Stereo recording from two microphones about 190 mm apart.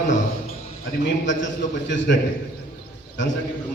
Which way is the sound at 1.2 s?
70° left (ahead or behind).